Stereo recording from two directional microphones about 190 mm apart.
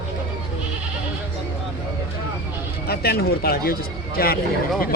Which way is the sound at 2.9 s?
55° left (ahead or behind).